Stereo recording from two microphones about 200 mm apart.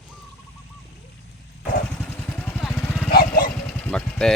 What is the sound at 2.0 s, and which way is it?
Vehicle, 10° left (ahead or behind).